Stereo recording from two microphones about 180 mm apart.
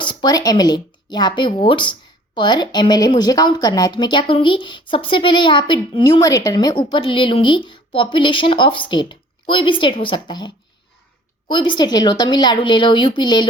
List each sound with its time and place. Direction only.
0.0 s speech: 25° left (ahead or behind)